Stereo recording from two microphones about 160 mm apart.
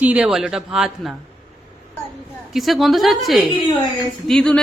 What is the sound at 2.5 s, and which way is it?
A man's voice, centre (ahead or behind).